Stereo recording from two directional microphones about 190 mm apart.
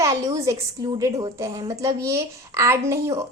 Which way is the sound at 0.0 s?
15° right (ahead or behind).